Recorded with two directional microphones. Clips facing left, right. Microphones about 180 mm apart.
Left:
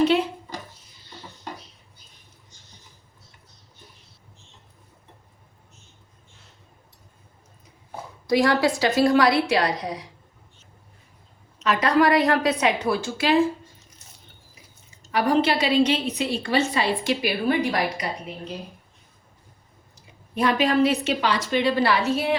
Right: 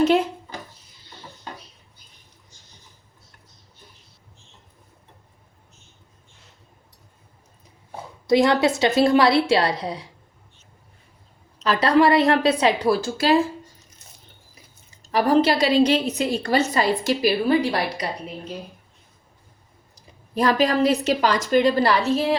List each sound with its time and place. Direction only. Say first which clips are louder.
8.3 s a woman's voice: right 2 dB; 25° right (ahead or behind)
11.6 s a woman's voice: right 2 dB; 30° right (ahead or behind)
15.1 s a woman's voice: right 3 dB; 40° right (ahead or behind)
20.3 s a woman's voice: right 1 dB; 40° right (ahead or behind)